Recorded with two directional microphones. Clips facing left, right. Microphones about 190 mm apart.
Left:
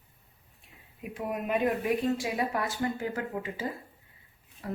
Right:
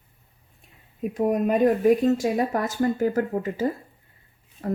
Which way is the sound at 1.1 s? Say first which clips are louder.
Right 9 dB; 40° right (ahead or behind).